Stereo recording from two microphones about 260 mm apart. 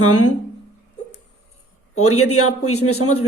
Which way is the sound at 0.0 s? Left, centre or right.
Left.